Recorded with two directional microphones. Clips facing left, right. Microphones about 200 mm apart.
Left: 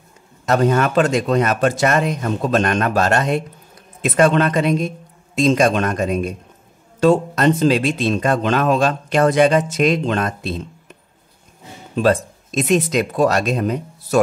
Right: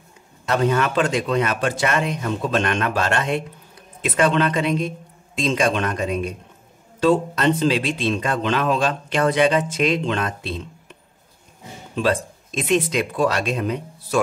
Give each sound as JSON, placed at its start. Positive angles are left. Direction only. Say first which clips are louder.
{"t": 0.5, "sound": "speech", "louder": "left 4 dB", "side_deg": 45}
{"t": 11.9, "sound": "speech", "louder": "left 5 dB", "side_deg": 40}